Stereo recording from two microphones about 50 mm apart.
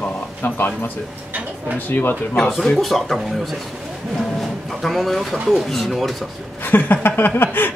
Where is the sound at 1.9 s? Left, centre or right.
Left.